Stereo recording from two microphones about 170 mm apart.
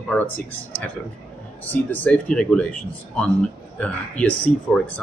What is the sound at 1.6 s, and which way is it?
Speech, 10° left (ahead or behind).